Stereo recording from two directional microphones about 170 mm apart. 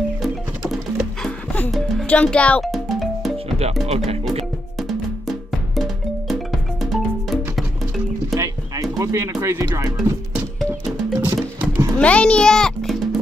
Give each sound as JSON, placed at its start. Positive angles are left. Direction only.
{"t": 0.7, "sound": "music", "side_deg": 0}
{"t": 3.8, "sound": "speech", "side_deg": -35}
{"t": 4.8, "sound": "music", "side_deg": 0}
{"t": 8.4, "sound": "music", "side_deg": -20}
{"t": 11.1, "sound": "music", "side_deg": -20}
{"t": 12.0, "sound": "a child's voice", "side_deg": 5}